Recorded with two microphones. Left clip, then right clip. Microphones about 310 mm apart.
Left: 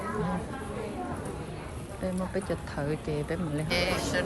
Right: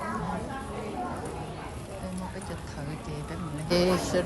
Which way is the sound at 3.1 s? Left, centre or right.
Centre.